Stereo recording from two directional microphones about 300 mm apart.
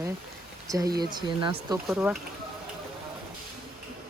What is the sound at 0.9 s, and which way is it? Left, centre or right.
Speech, centre.